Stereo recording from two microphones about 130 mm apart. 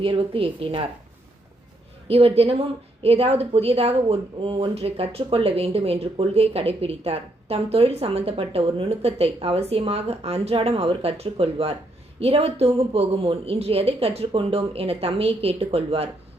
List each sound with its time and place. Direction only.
0.0 s a woman's voice: 45° right (ahead or behind)
2.0 s a woman's voice: 50° right (ahead or behind)